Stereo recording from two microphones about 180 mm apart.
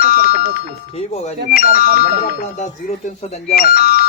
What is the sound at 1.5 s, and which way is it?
Speech, 50° left (ahead or behind).